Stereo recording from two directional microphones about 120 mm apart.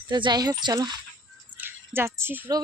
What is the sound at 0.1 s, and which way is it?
Speech, 40° right (ahead or behind).